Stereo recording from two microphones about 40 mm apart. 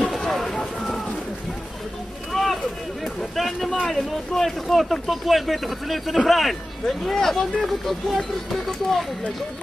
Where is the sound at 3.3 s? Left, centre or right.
Centre.